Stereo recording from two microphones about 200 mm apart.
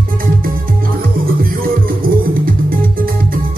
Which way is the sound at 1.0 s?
45° right (ahead or behind).